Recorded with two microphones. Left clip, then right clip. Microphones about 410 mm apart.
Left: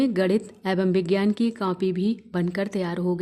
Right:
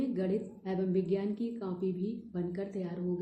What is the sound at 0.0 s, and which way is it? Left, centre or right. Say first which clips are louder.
A woman's voice: left 11 dB; left.